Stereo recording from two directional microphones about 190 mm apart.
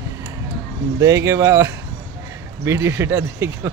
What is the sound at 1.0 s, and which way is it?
Speech, 15° right (ahead or behind).